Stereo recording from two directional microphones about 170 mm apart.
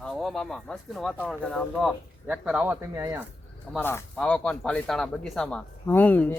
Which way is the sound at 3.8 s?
10° left (ahead or behind).